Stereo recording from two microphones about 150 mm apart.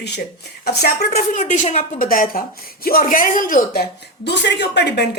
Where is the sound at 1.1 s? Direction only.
50° left (ahead or behind).